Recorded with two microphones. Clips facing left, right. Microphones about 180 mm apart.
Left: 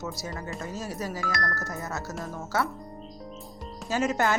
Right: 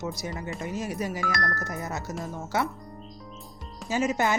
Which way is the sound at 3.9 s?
10° right (ahead or behind).